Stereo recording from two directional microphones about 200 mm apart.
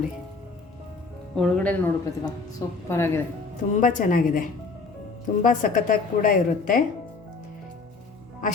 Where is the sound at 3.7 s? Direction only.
40° left (ahead or behind).